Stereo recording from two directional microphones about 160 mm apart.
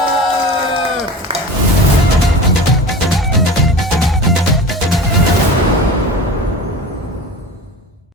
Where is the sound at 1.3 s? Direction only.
35° right (ahead or behind).